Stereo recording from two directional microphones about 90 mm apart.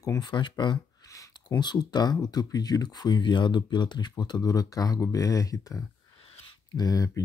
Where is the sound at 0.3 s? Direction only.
55° left (ahead or behind).